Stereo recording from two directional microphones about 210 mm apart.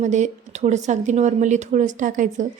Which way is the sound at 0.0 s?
35° right (ahead or behind).